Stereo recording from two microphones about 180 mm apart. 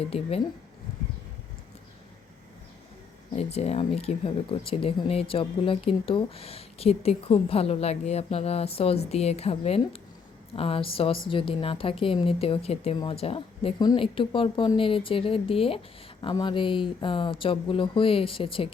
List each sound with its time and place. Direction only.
0.0 s speech: 35° left (ahead or behind)
3.3 s speech: 35° left (ahead or behind)